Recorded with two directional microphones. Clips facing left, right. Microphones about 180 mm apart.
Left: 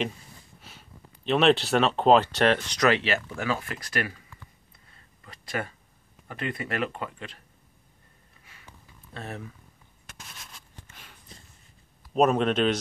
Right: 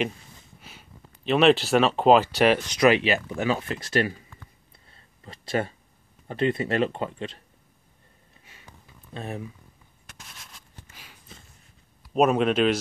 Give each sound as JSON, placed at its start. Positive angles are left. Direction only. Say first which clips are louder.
{"t": 0.6, "sound": "speech", "louder": "right 1 dB", "side_deg": 0}
{"t": 5.2, "sound": "speech", "louder": "right 6 dB", "side_deg": -25}
{"t": 8.5, "sound": "a sound", "louder": "right 1 dB", "side_deg": -20}
{"t": 12.1, "sound": "speech", "louder": "right 1 dB", "side_deg": -5}